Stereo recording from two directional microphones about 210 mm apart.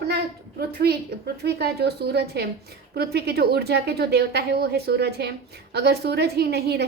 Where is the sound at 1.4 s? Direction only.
50° right (ahead or behind).